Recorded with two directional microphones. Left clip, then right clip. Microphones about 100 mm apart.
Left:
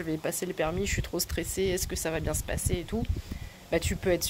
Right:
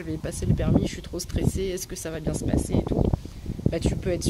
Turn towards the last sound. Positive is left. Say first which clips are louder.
# even
turn(degrees=-35)  # may be behind; listen again after turning